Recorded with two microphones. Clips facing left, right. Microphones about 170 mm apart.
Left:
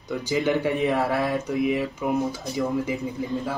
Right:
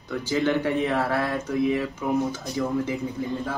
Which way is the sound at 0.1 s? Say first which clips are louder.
Even; 15° left (ahead or behind).